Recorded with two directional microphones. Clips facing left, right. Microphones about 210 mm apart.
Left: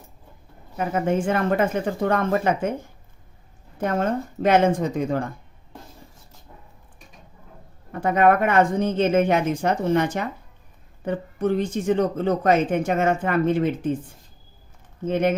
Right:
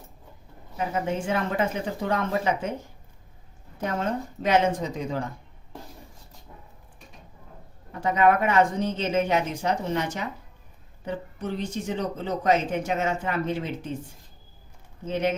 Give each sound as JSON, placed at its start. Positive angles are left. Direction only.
{"t": 0.8, "sound": "speech", "side_deg": 50}
{"t": 3.8, "sound": "speech", "side_deg": 55}
{"t": 7.9, "sound": "speech", "side_deg": 55}
{"t": 15.0, "sound": "speech", "side_deg": 55}